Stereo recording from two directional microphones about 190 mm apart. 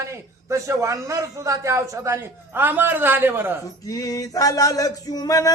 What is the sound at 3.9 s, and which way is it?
Male singing, 20° left (ahead or behind).